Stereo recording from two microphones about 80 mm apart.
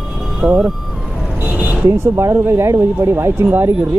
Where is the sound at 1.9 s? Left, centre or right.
Right.